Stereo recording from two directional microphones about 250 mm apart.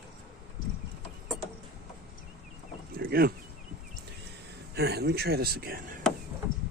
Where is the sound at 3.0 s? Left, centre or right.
Right.